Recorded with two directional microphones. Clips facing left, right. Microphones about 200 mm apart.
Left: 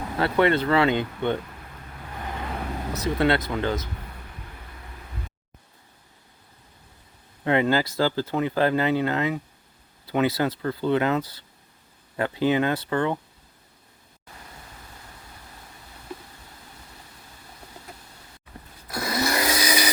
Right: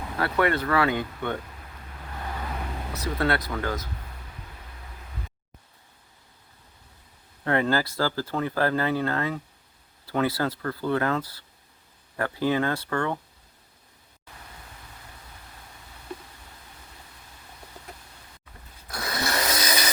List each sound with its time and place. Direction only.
0.2 s speech: 25° left (ahead or behind)
2.9 s speech: 20° left (ahead or behind)
7.4 s speech: 15° left (ahead or behind)
18.9 s sewing machine: centre (ahead or behind)
19.6 s a sound: 10° left (ahead or behind)